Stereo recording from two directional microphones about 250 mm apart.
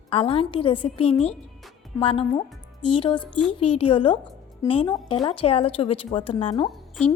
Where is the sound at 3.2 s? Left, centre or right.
Centre.